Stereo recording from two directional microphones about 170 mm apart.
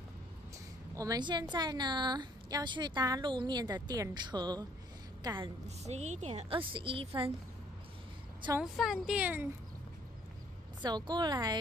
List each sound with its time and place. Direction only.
0.9 s a woman's voice: 20° right (ahead or behind)
5.9 s a woman's voice: 40° right (ahead or behind)
8.5 s speech: centre (ahead or behind)
10.8 s a woman's voice: 25° right (ahead or behind)